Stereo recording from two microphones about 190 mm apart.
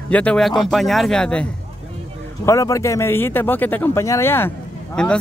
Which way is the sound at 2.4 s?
15° left (ahead or behind).